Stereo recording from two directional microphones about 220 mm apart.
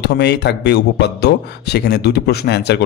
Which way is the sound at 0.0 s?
50° left (ahead or behind).